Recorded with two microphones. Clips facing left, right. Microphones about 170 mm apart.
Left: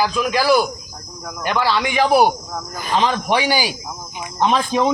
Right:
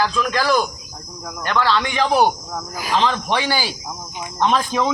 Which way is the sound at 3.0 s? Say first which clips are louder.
Left 2 dB; 15° left (ahead or behind).